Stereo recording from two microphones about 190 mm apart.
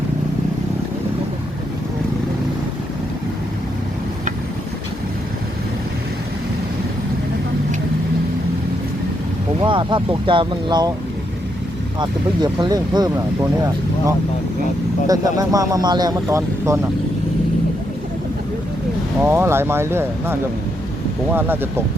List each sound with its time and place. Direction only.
9.6 s speech: 25° right (ahead or behind)
11.9 s speech: 20° right (ahead or behind)
15.0 s speech: 20° right (ahead or behind)
19.2 s speech: 15° right (ahead or behind)